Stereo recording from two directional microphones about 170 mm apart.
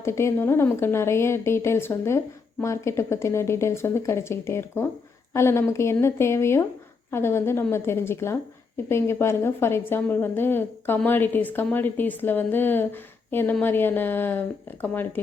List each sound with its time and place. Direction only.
0.0 s a woman's voice: 15° left (ahead or behind)